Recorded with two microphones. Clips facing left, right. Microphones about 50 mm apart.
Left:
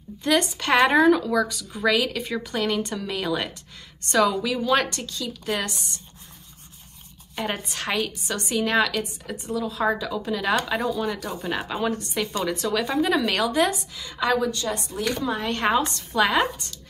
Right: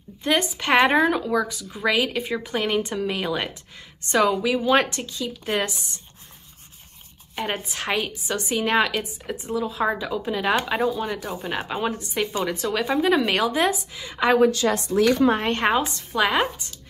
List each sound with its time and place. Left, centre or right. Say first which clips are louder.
0.2 s a woman's voice: even; centre
7.3 s speech: right 1 dB; centre
13.2 s speech: right 1 dB; right
14.5 s a woman's voice: right 7 dB; right
15.3 s speech: right 3 dB; right
15.6 s a woman's voice: right 1 dB; centre